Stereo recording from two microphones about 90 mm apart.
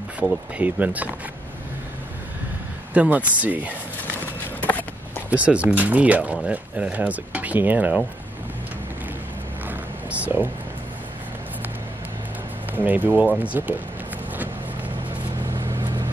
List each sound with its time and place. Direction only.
0.6 s speech: 20° right (ahead or behind)
2.9 s speech: 15° right (ahead or behind)
4.6 s a sound: 20° left (ahead or behind)
5.3 s speech: 15° right (ahead or behind)
10.2 s speech: 20° right (ahead or behind)
12.7 s speech: 20° right (ahead or behind)
15.8 s vehicle: 50° right (ahead or behind)